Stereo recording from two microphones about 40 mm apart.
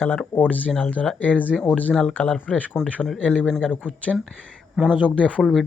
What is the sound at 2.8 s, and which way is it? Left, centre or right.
Speech, centre.